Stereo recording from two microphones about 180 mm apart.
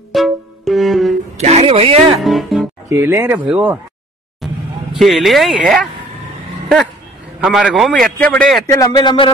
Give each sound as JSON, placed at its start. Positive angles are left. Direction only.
{"t": 0.1, "sound": "music", "side_deg": 0}
{"t": 1.4, "sound": "speech", "side_deg": -35}
{"t": 2.2, "sound": "music", "side_deg": 0}
{"t": 2.9, "sound": "speech", "side_deg": -15}
{"t": 4.4, "sound": "vehicle", "side_deg": 0}
{"t": 4.9, "sound": "a man's voice", "side_deg": 0}
{"t": 7.3, "sound": "a man's voice", "side_deg": 0}
{"t": 8.6, "sound": "speech", "side_deg": 20}